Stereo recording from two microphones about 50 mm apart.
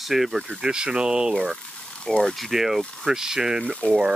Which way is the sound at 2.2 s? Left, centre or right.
Centre.